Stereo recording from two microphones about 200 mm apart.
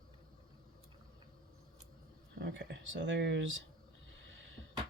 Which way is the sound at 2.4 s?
60° right (ahead or behind).